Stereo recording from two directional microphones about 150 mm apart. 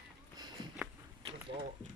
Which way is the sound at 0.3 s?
30° right (ahead or behind).